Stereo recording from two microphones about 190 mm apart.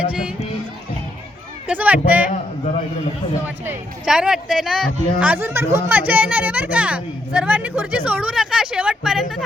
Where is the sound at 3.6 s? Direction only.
10° right (ahead or behind).